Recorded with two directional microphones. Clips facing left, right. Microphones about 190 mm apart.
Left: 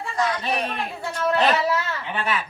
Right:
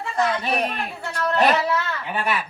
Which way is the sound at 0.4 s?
10° right (ahead or behind).